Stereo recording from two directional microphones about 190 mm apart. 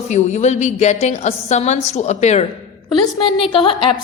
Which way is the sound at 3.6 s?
25° left (ahead or behind).